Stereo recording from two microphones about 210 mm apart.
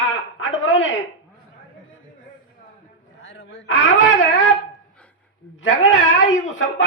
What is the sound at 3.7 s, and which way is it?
Speech, 65° left (ahead or behind).